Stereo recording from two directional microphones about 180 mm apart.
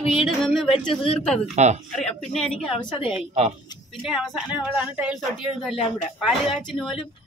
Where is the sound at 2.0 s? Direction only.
5° left (ahead or behind).